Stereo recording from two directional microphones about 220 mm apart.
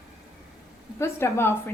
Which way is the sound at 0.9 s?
10° left (ahead or behind).